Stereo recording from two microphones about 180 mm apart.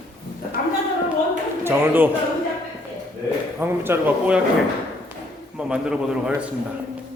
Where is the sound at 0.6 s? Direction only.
50° left (ahead or behind).